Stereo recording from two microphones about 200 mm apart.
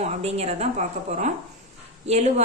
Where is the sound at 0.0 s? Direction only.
30° right (ahead or behind).